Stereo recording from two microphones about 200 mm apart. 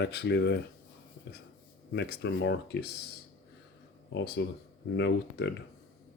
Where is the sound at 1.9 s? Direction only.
55° left (ahead or behind).